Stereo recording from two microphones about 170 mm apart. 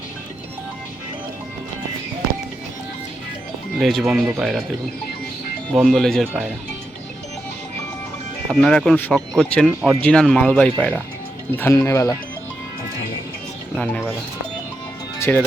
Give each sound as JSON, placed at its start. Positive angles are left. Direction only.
{"t": 3.8, "sound": "speech", "side_deg": 0}
{"t": 5.7, "sound": "speech", "side_deg": 0}
{"t": 8.4, "sound": "speech", "side_deg": 5}
{"t": 13.7, "sound": "speech", "side_deg": 10}
{"t": 15.2, "sound": "speech", "side_deg": 10}